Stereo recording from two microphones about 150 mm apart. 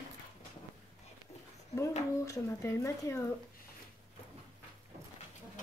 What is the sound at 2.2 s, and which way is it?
A child's voice, 20° left (ahead or behind).